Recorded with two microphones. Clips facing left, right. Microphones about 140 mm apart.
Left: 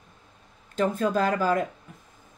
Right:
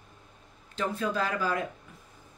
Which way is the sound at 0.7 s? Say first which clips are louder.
Left 6 dB; 45° left (ahead or behind).